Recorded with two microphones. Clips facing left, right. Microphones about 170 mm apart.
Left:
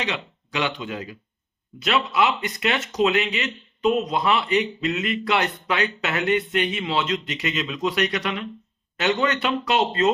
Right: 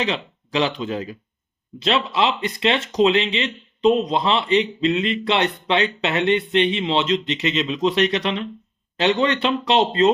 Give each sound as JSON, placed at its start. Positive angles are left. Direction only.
{"t": 0.0, "sound": "speech", "side_deg": -30}